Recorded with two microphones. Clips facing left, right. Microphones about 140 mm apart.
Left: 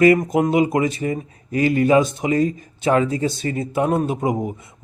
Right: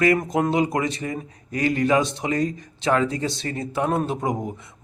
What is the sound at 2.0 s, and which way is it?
Speech, 25° right (ahead or behind).